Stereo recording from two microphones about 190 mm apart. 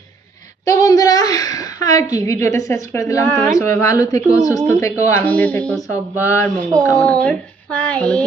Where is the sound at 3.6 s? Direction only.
15° left (ahead or behind).